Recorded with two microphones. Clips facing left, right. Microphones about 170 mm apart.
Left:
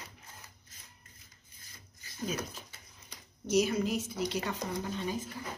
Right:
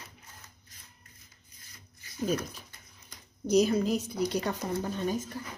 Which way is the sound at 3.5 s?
35° right (ahead or behind).